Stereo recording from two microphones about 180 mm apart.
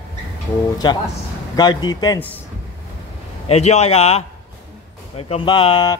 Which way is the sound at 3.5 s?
35° left (ahead or behind).